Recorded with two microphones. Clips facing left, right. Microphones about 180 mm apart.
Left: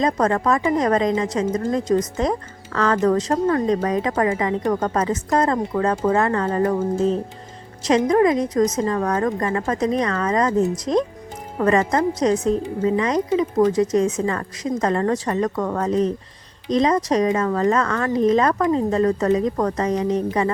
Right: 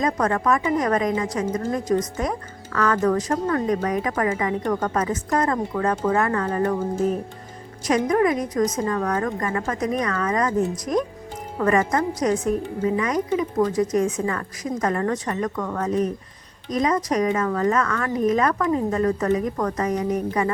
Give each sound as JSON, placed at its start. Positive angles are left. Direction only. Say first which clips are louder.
{"t": 0.0, "sound": "a woman's voice", "louder": "left 3 dB", "side_deg": 30}
{"t": 15.9, "sound": "a woman's voice", "louder": "left 3 dB", "side_deg": 25}